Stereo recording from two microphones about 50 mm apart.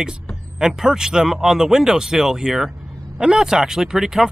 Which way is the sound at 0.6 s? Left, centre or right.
Centre.